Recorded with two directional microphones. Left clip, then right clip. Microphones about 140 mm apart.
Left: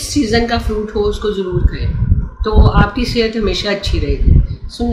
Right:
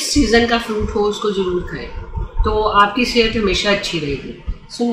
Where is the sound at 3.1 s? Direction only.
30° left (ahead or behind).